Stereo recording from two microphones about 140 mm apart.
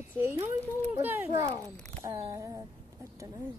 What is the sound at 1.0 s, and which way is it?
Speech, 15° right (ahead or behind).